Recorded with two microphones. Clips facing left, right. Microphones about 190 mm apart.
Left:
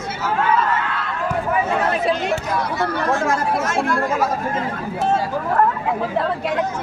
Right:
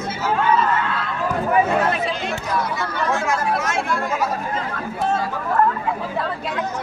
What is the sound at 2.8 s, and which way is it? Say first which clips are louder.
Speech: left 3 dB; 55° left (ahead or behind).